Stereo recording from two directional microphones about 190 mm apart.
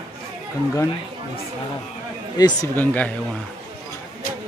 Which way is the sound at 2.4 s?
20° left (ahead or behind).